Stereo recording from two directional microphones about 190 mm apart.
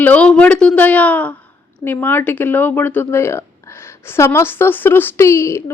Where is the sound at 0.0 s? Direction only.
5° left (ahead or behind).